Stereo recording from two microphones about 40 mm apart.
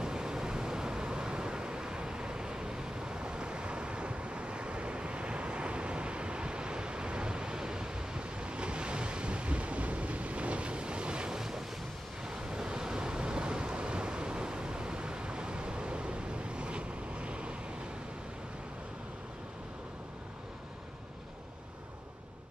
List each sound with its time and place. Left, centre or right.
0.0 s waves: centre
11.3 s ocean: centre
12.3 s waves: centre